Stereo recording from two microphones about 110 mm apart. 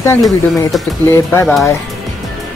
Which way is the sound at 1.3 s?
20° left (ahead or behind).